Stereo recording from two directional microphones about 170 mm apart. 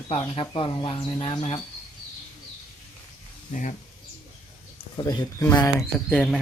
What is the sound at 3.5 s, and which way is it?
Speech, 45° left (ahead or behind).